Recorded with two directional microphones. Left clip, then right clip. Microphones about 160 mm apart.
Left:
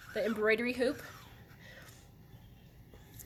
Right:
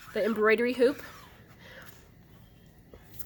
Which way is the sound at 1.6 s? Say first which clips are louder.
Right 5 dB; 40° right (ahead or behind).